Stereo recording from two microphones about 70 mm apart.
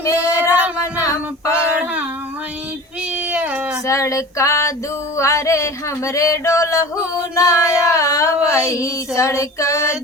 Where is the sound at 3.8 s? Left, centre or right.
Left.